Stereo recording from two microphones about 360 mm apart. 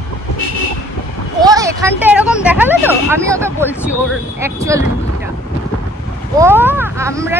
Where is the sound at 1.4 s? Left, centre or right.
Centre.